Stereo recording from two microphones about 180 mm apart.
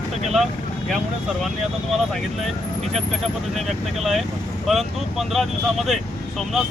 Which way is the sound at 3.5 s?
Centre (ahead or behind).